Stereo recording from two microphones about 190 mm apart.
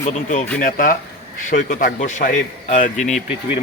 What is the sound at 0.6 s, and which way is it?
A man's voice, 45° left (ahead or behind).